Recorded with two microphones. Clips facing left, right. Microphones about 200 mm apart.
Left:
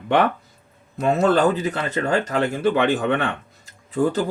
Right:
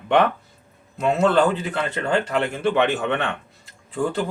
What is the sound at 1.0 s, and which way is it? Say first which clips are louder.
Speech: left 1 dB; 40° left (ahead or behind).